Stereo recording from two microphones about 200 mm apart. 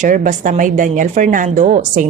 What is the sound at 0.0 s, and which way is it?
Speech, 40° right (ahead or behind).